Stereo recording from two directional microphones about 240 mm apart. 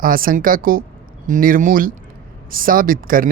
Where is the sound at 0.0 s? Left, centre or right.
Right.